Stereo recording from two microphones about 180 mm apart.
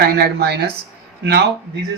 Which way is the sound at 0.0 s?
60° right (ahead or behind).